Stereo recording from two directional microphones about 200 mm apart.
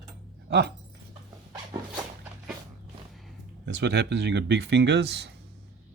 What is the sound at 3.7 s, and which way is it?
Speech, 60° right (ahead or behind).